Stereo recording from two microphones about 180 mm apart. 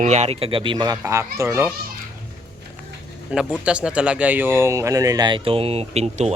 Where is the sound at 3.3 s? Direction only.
5° right (ahead or behind); by 6.3 s 35° right (ahead or behind).